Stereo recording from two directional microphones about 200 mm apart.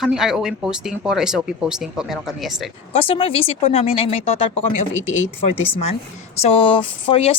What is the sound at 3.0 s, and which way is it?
Speech, 25° left (ahead or behind).